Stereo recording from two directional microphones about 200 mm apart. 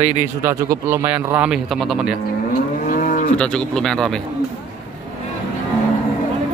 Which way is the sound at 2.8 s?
45° left (ahead or behind).